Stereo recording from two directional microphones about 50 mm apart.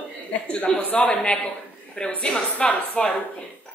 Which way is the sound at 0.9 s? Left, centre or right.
Left.